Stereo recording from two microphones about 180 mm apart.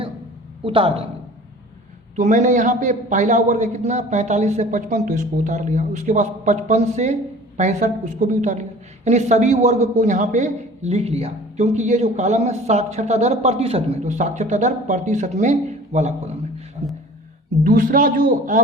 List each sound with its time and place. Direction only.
0.6 s speech: 30° right (ahead or behind)
2.1 s a man's voice: 40° right (ahead or behind)
17.6 s a woman's voice: 50° right (ahead or behind)